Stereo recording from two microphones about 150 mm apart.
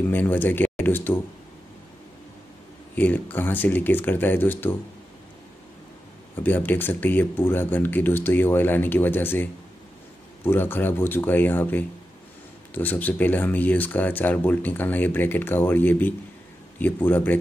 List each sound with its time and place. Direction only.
0.0 s speech: 15° left (ahead or behind)
3.0 s speech: 10° left (ahead or behind)
6.3 s speech: 10° left (ahead or behind)